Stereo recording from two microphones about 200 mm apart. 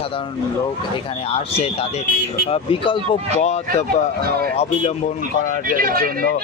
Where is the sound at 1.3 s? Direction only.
30° left (ahead or behind).